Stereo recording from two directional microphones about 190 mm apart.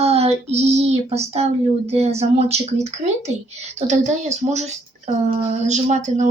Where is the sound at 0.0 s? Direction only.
35° right (ahead or behind).